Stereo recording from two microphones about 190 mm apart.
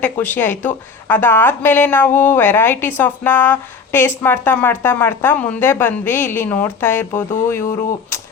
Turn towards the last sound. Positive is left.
turn(degrees=45)  # may be behind; listen again after turning